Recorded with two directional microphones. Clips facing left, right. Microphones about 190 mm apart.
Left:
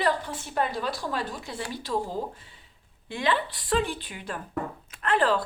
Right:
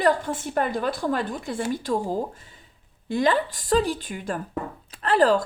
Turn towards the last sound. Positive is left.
turn(degrees=-40)  # may be behind; listen again after turning